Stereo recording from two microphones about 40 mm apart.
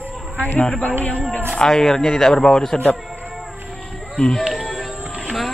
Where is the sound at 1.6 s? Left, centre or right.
Centre.